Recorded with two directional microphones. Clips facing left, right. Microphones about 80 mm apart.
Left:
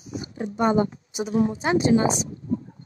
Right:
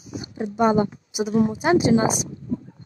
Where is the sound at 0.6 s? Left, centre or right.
Centre.